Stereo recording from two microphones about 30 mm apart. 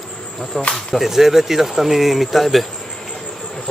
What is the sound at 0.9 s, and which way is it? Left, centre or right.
Speech, centre.